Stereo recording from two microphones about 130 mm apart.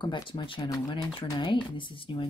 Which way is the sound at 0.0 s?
40° left (ahead or behind).